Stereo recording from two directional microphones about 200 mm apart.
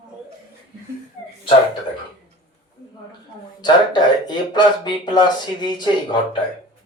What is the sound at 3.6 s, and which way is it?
Speech, 20° left (ahead or behind).